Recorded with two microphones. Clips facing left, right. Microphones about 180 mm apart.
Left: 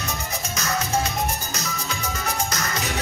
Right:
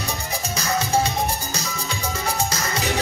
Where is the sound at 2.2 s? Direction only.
30° right (ahead or behind).